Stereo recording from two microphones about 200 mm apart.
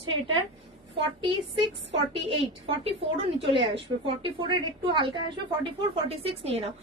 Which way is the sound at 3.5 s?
25° right (ahead or behind).